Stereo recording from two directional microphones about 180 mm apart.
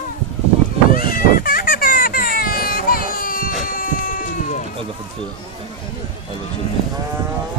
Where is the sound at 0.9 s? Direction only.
55° left (ahead or behind).